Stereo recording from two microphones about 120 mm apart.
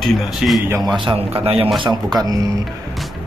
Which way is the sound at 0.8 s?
40° right (ahead or behind).